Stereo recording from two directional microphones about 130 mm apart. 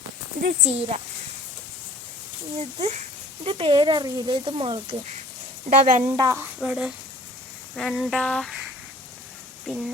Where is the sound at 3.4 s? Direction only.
45° right (ahead or behind).